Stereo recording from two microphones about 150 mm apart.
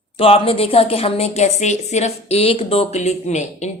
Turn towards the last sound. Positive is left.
turn(degrees=50)  # may be behind; listen again after turning